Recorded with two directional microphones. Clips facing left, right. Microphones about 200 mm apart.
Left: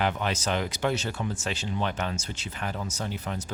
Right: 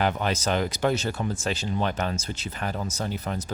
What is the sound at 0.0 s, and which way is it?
Speech, 40° right (ahead or behind).